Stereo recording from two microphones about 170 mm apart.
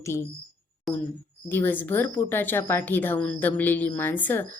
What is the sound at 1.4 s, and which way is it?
Speech, 10° left (ahead or behind).